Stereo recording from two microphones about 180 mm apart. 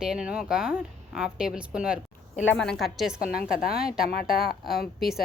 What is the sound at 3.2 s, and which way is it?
Speech, 55° left (ahead or behind).